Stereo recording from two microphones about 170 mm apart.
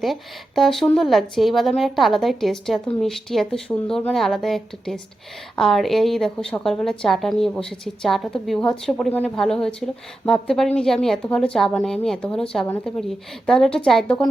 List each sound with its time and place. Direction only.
0.0 s a woman's voice: centre (ahead or behind)